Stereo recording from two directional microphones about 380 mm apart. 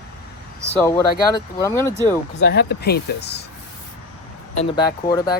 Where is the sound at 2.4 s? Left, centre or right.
Left.